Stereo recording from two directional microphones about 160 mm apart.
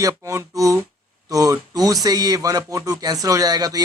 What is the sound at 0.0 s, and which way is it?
Speech, 20° right (ahead or behind).